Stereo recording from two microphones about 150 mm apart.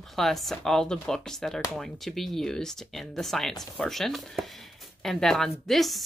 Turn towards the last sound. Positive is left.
turn(degrees=0)  # may be behind; listen again after turning